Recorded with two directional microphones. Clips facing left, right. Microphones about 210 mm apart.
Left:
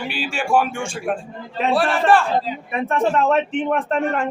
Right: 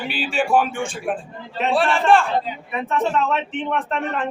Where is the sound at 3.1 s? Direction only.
45° left (ahead or behind).